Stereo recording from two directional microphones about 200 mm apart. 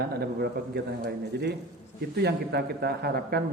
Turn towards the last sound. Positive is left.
turn(degrees=-50)  # may be behind; listen again after turning